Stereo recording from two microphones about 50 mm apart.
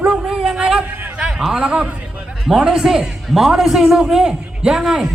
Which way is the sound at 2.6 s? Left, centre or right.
Centre.